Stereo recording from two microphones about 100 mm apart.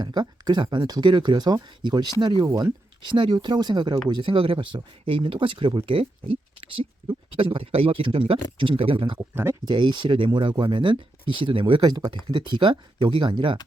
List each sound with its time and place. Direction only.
0.0 s speech: 45° right (ahead or behind); by 9.1 s 65° right (ahead or behind)
9.1 s speech: 25° right (ahead or behind)
9.6 s speech: 50° right (ahead or behind)